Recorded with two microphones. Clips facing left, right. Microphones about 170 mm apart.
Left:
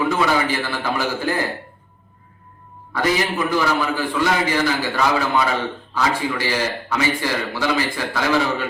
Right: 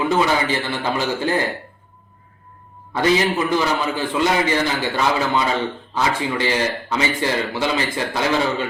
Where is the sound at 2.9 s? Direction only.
20° right (ahead or behind).